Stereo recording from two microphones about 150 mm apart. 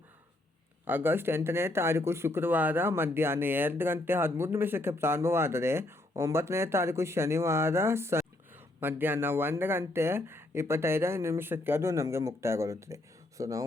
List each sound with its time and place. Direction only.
0.9 s speech: 15° right (ahead or behind)